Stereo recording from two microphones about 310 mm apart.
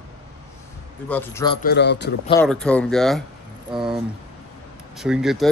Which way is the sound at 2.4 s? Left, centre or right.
Centre.